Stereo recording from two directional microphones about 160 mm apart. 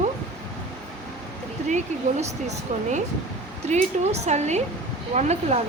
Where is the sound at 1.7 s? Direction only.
45° right (ahead or behind).